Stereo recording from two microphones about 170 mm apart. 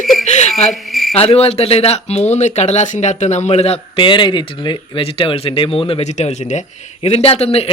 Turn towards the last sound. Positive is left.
turn(degrees=35)  # may be behind; listen again after turning